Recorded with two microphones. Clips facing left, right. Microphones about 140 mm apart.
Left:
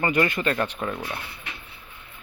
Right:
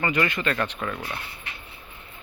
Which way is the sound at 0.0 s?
35° left (ahead or behind).